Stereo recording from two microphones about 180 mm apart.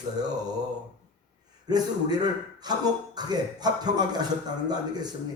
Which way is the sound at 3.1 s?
20° right (ahead or behind).